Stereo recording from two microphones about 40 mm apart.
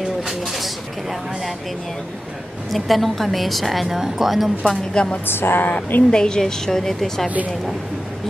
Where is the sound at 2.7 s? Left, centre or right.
Centre.